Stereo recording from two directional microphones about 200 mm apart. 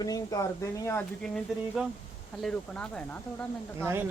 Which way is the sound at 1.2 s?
Centre (ahead or behind).